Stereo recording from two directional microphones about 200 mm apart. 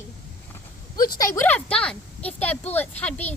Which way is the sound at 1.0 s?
20° left (ahead or behind).